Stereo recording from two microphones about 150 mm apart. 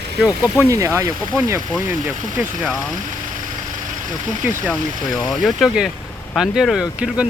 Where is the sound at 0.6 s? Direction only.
20° right (ahead or behind).